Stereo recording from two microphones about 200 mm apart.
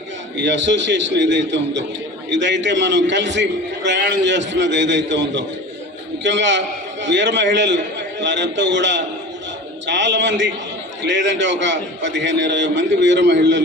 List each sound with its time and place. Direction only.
0.4 s a man's voice: 65° right (ahead or behind)